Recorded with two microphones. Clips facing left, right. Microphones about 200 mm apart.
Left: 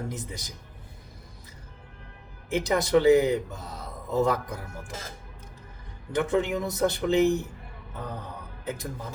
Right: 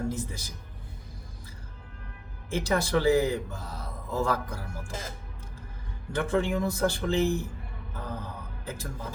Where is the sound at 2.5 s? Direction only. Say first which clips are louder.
Left 4 dB; 20° left (ahead or behind).